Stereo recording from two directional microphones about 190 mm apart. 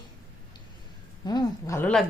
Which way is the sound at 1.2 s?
15° left (ahead or behind).